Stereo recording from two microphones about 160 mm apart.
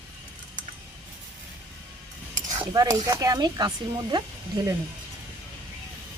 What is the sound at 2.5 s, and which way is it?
Speech, 25° right (ahead or behind).